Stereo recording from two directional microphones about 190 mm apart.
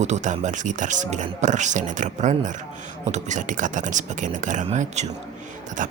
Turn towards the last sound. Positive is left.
turn(degrees=-45)  # may be behind; listen again after turning